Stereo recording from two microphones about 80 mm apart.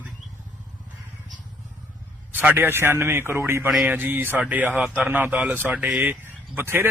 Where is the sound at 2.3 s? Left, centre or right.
Right.